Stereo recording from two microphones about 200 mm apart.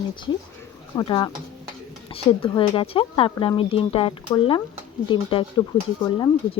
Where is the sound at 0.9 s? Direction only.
20° left (ahead or behind).